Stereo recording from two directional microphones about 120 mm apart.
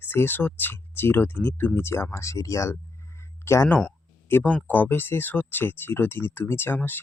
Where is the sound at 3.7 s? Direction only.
10° left (ahead or behind).